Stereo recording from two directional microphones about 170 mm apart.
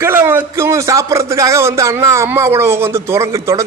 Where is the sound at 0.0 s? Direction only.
15° right (ahead or behind).